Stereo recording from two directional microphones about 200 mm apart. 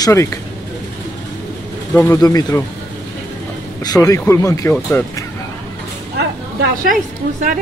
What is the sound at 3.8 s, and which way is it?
Speech, 15° left (ahead or behind).